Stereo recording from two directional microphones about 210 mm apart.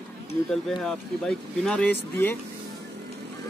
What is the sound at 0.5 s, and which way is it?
Speech, centre (ahead or behind).